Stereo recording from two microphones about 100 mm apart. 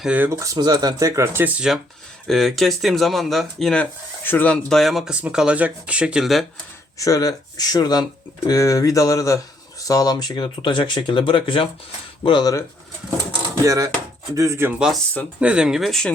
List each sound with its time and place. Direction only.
0.0 s speech: 10° right (ahead or behind)
0.3 s speech: 30° right (ahead or behind)
0.5 s speech: 40° right (ahead or behind); by 1.8 s 10° right (ahead or behind)
2.2 s speech: centre (ahead or behind)
4.2 s speech: 20° left (ahead or behind)
4.7 s speech: centre (ahead or behind)
7.0 s speech: 35° left (ahead or behind); by 11.7 s 60° left (ahead or behind)
12.2 s speech: 45° left (ahead or behind)
13.7 s speech: 35° right (ahead or behind)
14.7 s speech: 10° right (ahead or behind)